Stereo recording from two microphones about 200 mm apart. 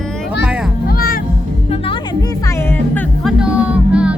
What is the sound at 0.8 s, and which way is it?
Music, 45° left (ahead or behind).